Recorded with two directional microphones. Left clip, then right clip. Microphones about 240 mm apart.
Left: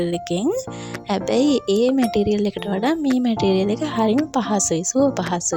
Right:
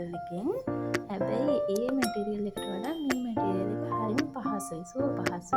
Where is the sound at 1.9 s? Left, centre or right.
Centre.